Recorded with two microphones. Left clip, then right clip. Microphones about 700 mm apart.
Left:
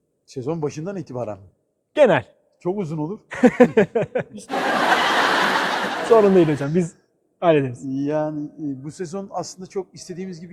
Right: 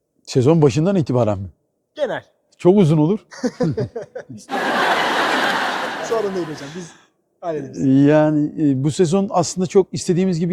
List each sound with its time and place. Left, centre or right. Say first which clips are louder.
0.3 s speech: right 11 dB; right
1.9 s speech: left 8 dB; left
2.6 s speech: right 11 dB; right
3.3 s a sound: left 8 dB; left
4.4 s chuckle: right 3 dB; centre
7.3 s speech: left 8 dB; left
7.9 s speech: right 9 dB; right